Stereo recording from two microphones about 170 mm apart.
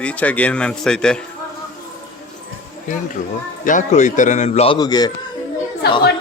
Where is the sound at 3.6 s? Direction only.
50° left (ahead or behind).